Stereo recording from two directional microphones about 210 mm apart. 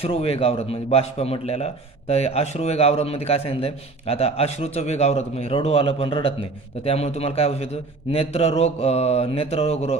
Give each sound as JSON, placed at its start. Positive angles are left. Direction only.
{"t": 0.0, "sound": "a man's voice", "side_deg": 30}